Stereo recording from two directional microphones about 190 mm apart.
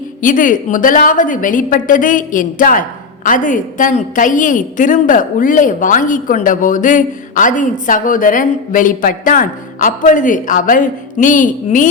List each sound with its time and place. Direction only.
0.2 s a woman's voice: 45° left (ahead or behind)